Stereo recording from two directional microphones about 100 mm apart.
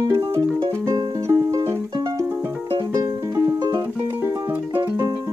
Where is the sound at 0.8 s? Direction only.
30° right (ahead or behind).